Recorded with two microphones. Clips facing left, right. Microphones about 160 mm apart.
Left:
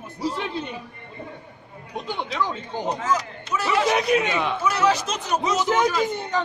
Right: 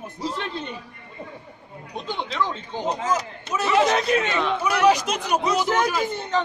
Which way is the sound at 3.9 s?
15° left (ahead or behind).